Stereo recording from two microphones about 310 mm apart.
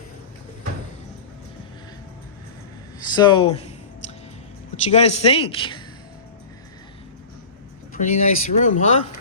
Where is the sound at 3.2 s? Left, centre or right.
Centre.